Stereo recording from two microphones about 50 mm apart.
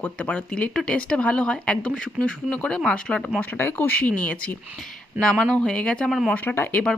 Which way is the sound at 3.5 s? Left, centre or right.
Left.